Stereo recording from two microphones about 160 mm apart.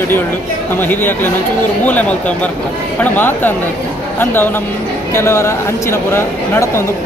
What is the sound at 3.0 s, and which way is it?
Speech, 10° left (ahead or behind).